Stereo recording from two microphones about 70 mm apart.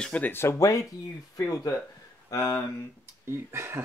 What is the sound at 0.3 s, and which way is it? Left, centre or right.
Speech, left.